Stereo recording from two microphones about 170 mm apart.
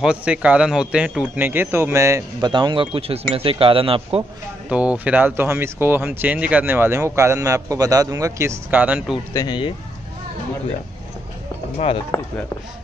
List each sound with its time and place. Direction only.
0.0 s speech: 5° right (ahead or behind); by 4.2 s 35° right (ahead or behind)
4.6 s speech: 10° right (ahead or behind)
9.3 s speech: 25° left (ahead or behind)
12.1 s speech: 20° left (ahead or behind)